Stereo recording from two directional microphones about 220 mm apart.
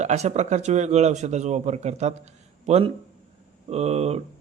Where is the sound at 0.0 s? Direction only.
30° right (ahead or behind).